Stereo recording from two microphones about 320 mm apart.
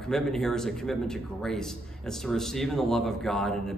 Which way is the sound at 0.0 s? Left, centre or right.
Centre.